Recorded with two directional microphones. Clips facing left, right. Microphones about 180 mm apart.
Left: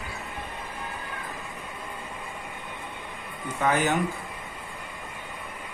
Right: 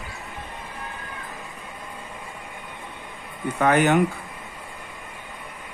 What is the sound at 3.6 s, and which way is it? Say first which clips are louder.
Speech: right 6 dB; 65° right (ahead or behind).